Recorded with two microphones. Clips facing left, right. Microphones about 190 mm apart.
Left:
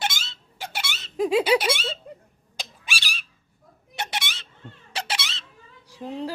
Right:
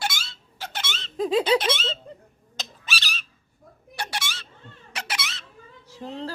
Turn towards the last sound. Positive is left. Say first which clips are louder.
# left 2 dB
turn(degrees=15)  # may be behind; listen again after turning